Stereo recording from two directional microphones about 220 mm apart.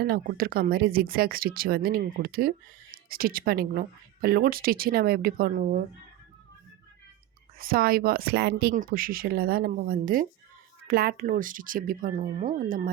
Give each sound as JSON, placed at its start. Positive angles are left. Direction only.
{"t": 0.0, "sound": "speech", "side_deg": -45}
{"t": 7.6, "sound": "speech", "side_deg": -40}